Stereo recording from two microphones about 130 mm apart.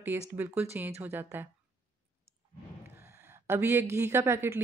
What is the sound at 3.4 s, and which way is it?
Speech, 20° right (ahead or behind).